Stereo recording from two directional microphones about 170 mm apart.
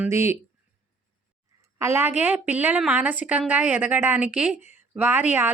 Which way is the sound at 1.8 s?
15° right (ahead or behind).